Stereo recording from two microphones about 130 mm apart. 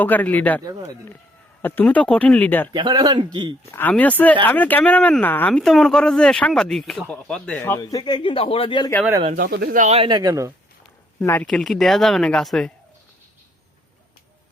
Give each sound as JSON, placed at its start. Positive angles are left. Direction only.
{"t": 0.0, "sound": "speech", "side_deg": 15}
{"t": 0.6, "sound": "speech", "side_deg": -30}
{"t": 1.6, "sound": "speech", "side_deg": 15}
{"t": 2.7, "sound": "speech", "side_deg": -35}
{"t": 3.7, "sound": "speech", "side_deg": 15}
{"t": 7.6, "sound": "a man's voice", "side_deg": 20}
{"t": 9.3, "sound": "speech", "side_deg": -85}
{"t": 9.9, "sound": "speech", "side_deg": -40}
{"t": 11.2, "sound": "speech", "side_deg": 15}
{"t": 11.4, "sound": "speech", "side_deg": 5}